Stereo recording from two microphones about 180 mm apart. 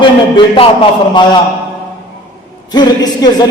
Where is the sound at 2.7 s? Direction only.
20° left (ahead or behind).